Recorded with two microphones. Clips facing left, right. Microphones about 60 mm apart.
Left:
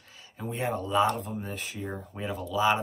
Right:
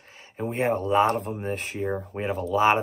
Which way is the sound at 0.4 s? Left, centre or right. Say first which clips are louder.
Right 6 dB; right.